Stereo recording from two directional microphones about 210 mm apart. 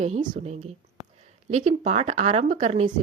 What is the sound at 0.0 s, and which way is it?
A woman's voice, 35° right (ahead or behind).